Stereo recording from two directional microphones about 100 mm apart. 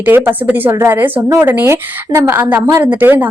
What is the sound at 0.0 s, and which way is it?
Speech, 20° right (ahead or behind).